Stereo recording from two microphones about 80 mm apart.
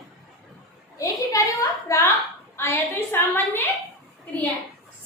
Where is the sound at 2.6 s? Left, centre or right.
Left.